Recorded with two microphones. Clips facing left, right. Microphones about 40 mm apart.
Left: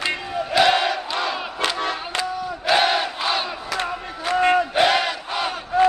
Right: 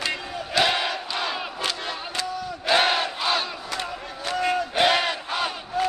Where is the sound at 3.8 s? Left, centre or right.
Left.